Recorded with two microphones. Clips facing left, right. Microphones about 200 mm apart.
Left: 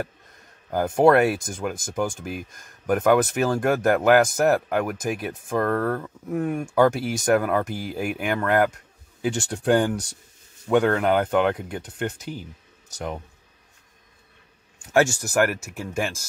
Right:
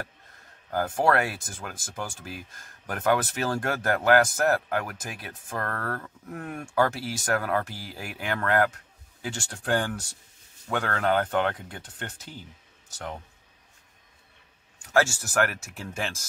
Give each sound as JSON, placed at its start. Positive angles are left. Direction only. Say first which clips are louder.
{"t": 0.7, "sound": "speech", "louder": "left 7 dB", "side_deg": 20}
{"t": 15.0, "sound": "speech", "louder": "left 4 dB", "side_deg": 15}